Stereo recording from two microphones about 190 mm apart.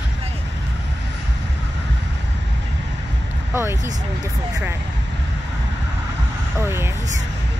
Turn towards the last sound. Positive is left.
turn(degrees=-15)  # may be behind; listen again after turning